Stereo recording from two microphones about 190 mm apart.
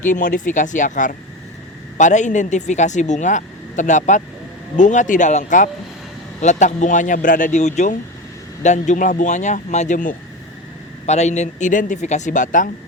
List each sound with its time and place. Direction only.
0.1 s speech: 45° left (ahead or behind)